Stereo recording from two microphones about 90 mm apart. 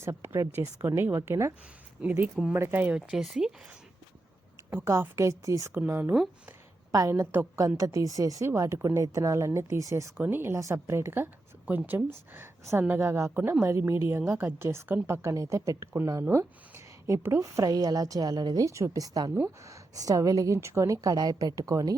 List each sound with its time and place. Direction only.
0.0 s a woman's voice: 30° right (ahead or behind)
2.0 s speech: 15° right (ahead or behind)
4.7 s a woman's voice: 30° right (ahead or behind)
5.8 s a woman's voice: 20° right (ahead or behind)
6.9 s a woman's voice: 35° right (ahead or behind)
10.2 s a woman's voice: 25° right (ahead or behind)
17.6 s a woman's voice: 40° right (ahead or behind)